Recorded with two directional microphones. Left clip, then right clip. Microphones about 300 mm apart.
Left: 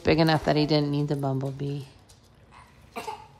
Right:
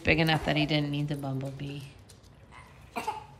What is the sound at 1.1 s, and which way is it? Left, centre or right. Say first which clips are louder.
Speech: left 7 dB; right.